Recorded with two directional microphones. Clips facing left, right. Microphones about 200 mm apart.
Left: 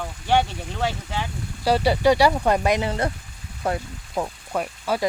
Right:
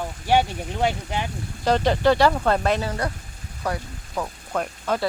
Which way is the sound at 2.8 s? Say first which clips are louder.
Left 2 dB; 25° left (ahead or behind).